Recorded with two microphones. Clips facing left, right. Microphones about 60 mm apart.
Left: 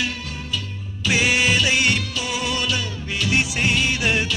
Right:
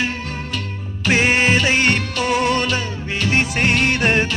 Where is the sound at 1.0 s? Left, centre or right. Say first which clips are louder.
Right 3 dB; right.